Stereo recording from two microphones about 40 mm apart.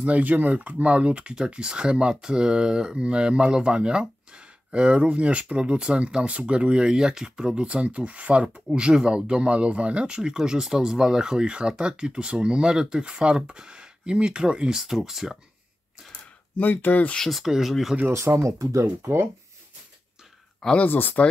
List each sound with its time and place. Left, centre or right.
0.0 s speech: right
8.5 s speech: right
15.0 s speech: centre
16.5 s speech: left
17.3 s speech: centre
18.3 s speech: right
20.9 s speech: left